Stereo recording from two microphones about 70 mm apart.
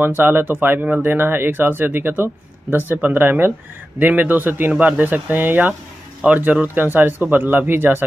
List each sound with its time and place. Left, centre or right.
0.0 s speech: right